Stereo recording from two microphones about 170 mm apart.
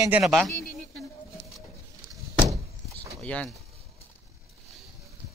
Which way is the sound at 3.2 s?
10° left (ahead or behind).